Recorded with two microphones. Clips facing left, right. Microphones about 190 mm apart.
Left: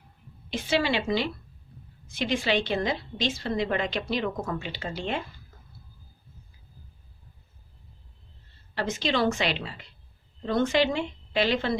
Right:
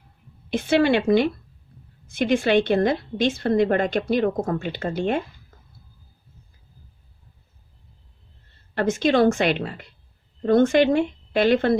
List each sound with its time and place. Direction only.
0.5 s a woman's voice: 55° right (ahead or behind)
8.7 s a woman's voice: 55° right (ahead or behind)